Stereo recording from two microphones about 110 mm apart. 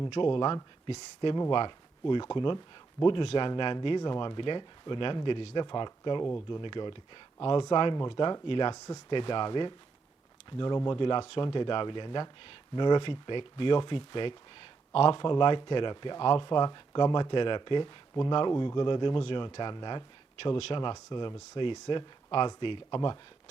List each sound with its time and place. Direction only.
0.1 s speech: 50° left (ahead or behind)